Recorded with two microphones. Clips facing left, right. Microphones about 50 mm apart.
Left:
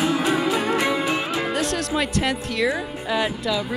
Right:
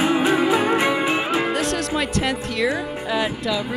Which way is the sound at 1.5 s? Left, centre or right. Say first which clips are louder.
Right 1 dB; centre.